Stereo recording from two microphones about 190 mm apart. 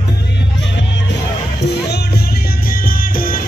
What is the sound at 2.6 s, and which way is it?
Music, 50° left (ahead or behind).